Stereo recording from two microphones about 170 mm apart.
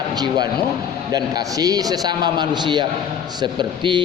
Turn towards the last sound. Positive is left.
turn(degrees=-25)  # may be behind; listen again after turning